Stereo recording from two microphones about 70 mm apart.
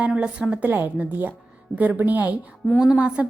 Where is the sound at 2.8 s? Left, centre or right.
Centre.